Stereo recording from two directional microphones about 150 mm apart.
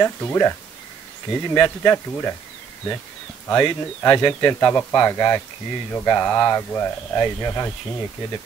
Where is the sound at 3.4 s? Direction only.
15° left (ahead or behind).